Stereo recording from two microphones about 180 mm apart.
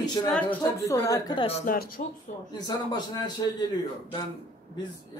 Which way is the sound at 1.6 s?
55° left (ahead or behind).